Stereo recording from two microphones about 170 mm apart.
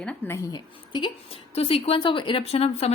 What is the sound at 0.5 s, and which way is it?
Speech, 25° left (ahead or behind).